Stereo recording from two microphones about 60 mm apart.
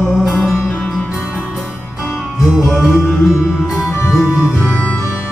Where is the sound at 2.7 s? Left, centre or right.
Centre.